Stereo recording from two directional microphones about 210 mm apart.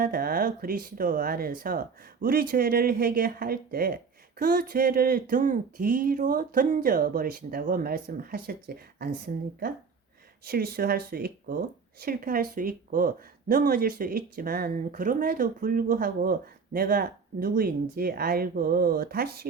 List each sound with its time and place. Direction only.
0.0 s speech: 45° right (ahead or behind)